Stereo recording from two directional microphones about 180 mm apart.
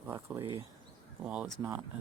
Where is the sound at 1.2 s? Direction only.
10° right (ahead or behind).